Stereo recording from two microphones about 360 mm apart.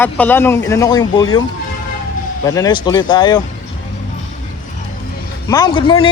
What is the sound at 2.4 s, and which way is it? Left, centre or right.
Speech, centre.